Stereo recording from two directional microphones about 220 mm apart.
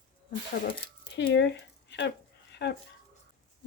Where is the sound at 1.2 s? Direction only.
50° left (ahead or behind).